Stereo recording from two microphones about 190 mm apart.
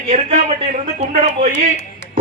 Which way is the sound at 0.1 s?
40° right (ahead or behind).